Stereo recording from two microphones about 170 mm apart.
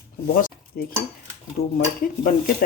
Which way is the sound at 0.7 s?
60° left (ahead or behind).